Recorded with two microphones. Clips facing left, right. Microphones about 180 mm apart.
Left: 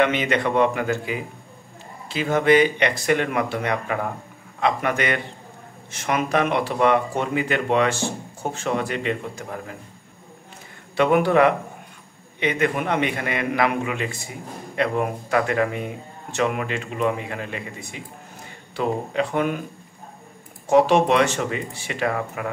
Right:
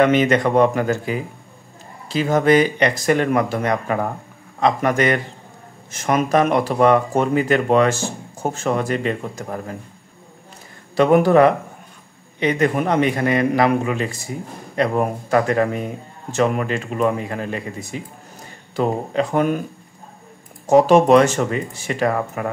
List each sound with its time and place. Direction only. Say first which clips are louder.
0.0 s speech: right 5 dB; 45° right (ahead or behind)
11.0 s speech: right 4 dB; 40° right (ahead or behind)
20.6 s speech: right 4 dB; 40° right (ahead or behind)